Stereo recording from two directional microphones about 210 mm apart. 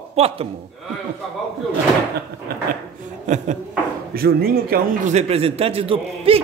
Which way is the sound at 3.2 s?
35° right (ahead or behind).